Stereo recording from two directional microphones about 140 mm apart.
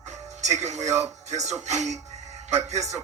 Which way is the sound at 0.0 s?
55° right (ahead or behind).